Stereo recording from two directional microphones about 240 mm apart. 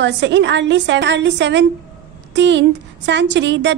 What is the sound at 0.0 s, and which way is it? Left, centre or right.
A woman's voice, right.